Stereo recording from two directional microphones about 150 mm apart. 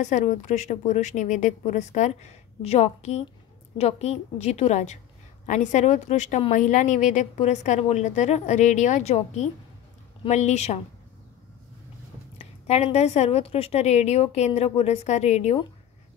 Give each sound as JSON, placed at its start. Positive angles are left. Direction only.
{"t": 0.0, "sound": "a woman's voice", "side_deg": 55}
{"t": 12.4, "sound": "a woman's voice", "side_deg": 45}